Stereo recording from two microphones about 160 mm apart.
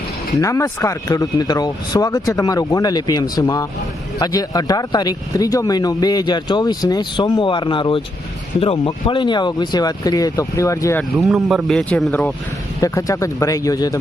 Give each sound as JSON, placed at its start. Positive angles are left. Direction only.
{"t": 0.3, "sound": "speech", "side_deg": 20}
{"t": 11.2, "sound": "speech", "side_deg": 0}
{"t": 12.8, "sound": "speech", "side_deg": 20}